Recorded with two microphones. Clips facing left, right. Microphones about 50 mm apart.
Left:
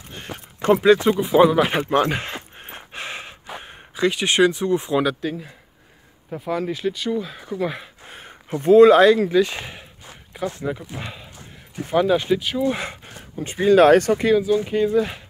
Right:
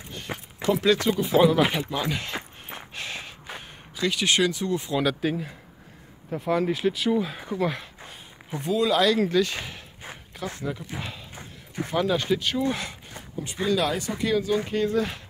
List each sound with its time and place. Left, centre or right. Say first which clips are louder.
0.3 s a sound: right 1 dB; right
0.8 s speech: left 6 dB; left
1.2 s speech: left 1 dB; centre
1.7 s a sound: left 8 dB; left
3.6 s speech: left 7 dB; left
5.2 s speech: right 1 dB; centre
8.1 s a sound: left 8 dB; left
9.3 s speech: left 5 dB; left
11.0 s speech: left 2 dB; centre
12.6 s speech: left 5 dB; left
13.4 s speech: left 11 dB; left
14.3 s speech: left 2 dB; centre